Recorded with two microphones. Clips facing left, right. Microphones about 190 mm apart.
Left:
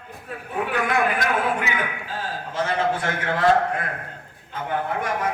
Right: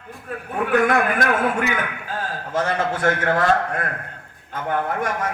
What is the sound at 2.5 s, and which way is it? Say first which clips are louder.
Speech: right 1 dB; 45° right (ahead or behind).